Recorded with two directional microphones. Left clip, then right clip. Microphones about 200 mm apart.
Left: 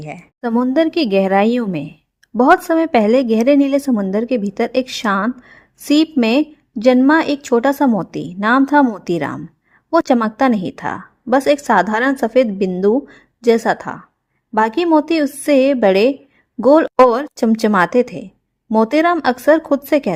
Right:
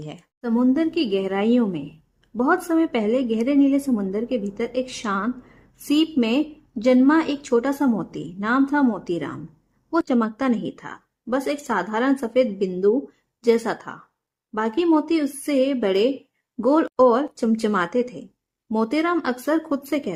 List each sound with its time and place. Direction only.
0.4 s a woman's voice: 35° left (ahead or behind)